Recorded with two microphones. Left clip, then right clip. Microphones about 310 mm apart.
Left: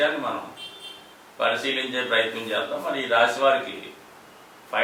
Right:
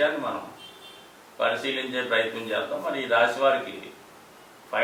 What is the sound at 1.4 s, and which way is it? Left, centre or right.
A man's voice, centre.